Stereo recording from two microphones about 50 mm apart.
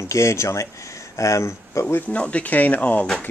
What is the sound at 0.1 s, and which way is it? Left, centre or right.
Speech, left.